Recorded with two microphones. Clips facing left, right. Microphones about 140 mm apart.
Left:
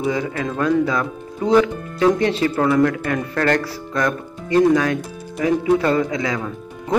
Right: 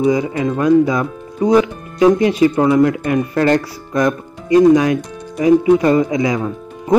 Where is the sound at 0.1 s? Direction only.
15° right (ahead or behind).